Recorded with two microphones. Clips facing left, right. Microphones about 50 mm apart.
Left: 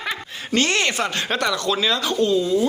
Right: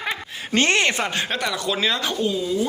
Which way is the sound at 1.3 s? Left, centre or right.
Centre.